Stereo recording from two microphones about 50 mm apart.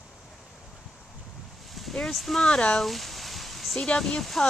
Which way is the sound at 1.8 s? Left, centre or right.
Centre.